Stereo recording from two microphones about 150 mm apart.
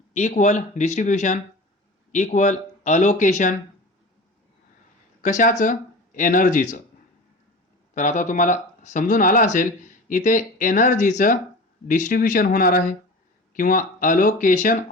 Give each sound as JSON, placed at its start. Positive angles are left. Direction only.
{"t": 0.1, "sound": "speech", "side_deg": 50}
{"t": 5.2, "sound": "speech", "side_deg": 60}
{"t": 7.9, "sound": "speech", "side_deg": 55}